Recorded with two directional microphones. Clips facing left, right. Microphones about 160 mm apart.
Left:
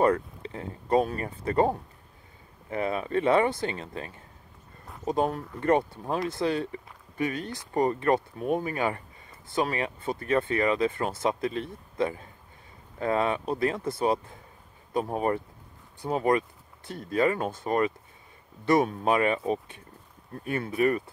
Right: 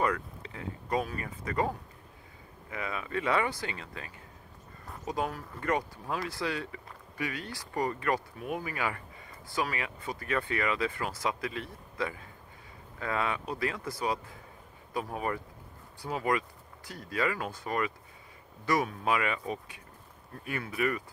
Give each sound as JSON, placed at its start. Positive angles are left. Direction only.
{"t": 0.0, "sound": "speech", "side_deg": 30}